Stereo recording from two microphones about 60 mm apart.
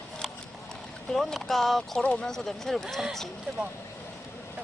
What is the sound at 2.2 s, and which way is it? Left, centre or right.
Speech, centre.